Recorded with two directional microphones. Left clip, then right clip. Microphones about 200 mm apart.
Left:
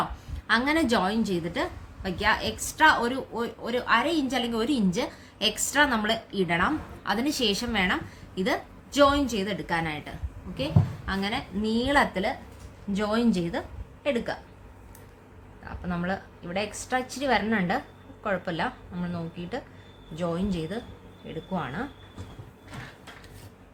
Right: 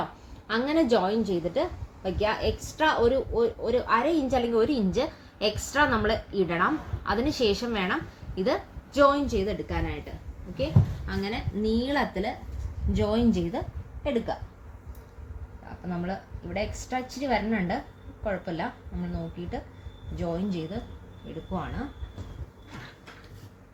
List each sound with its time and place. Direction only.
0.4 s a woman's voice: 55° left (ahead or behind)
9.0 s a woman's voice: 50° left (ahead or behind)
11.0 s a woman's voice: 20° left (ahead or behind); by 14.3 s 5° left (ahead or behind)
15.9 s a woman's voice: 10° left (ahead or behind)